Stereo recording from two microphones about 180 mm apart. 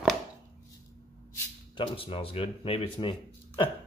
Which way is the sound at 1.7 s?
30° left (ahead or behind).